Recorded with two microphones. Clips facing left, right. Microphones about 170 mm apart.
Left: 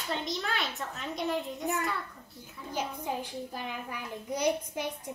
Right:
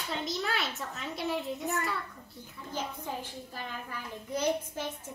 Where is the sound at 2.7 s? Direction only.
10° left (ahead or behind).